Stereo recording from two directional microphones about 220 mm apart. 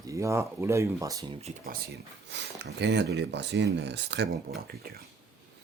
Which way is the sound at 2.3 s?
50° right (ahead or behind).